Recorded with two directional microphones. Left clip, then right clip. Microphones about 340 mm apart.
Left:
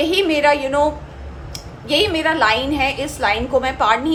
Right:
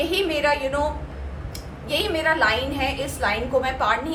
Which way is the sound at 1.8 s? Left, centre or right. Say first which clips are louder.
Left 5 dB; left.